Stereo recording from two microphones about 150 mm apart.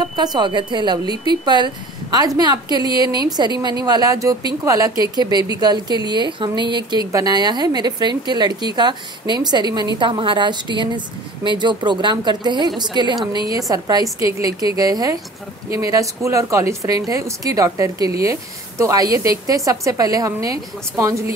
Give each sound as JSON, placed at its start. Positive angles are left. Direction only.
{"t": 0.1, "sound": "a woman's voice", "side_deg": -30}